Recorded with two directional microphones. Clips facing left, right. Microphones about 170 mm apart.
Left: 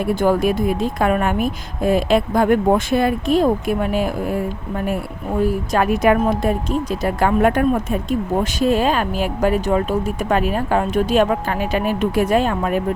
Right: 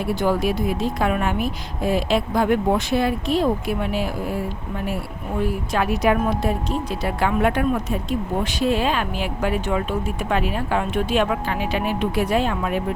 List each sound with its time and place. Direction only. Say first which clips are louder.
0.0 s a woman's voice: left 4 dB; 50° left (ahead or behind)
5.4 s a woman's voice: left 5 dB; 45° left (ahead or behind)